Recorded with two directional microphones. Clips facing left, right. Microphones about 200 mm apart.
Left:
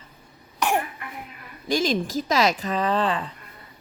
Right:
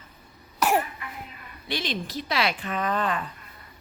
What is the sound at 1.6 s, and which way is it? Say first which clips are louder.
Speech: left 8 dB; 45° left (ahead or behind).